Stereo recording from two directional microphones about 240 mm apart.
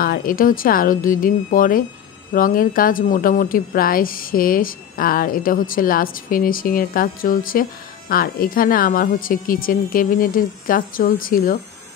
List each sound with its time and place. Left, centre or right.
0.0 s speech: left